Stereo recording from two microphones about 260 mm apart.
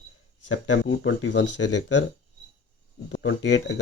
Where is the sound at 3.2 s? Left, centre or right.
Left.